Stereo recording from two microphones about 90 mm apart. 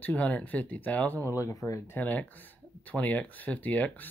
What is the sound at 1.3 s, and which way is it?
Speech, 35° left (ahead or behind).